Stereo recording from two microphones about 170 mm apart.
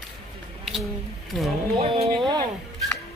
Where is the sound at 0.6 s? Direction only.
Centre (ahead or behind).